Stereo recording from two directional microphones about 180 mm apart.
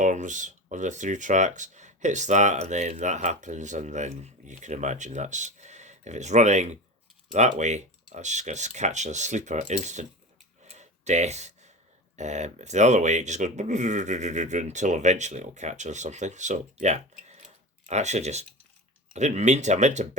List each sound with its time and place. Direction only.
0.0 s speech: 45° right (ahead or behind)
10.7 s a sound: 40° right (ahead or behind)
12.1 s speech: 40° right (ahead or behind)